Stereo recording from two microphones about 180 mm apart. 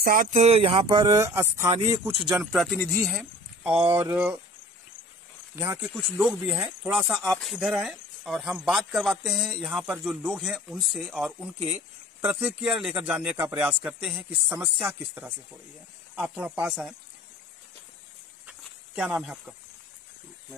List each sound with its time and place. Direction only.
0.0 s speech: 50° right (ahead or behind); by 1.7 s 15° right (ahead or behind)
2.2 s speech: centre (ahead or behind)
5.6 s speech: 15° right (ahead or behind)
18.5 s a sound: 5° right (ahead or behind)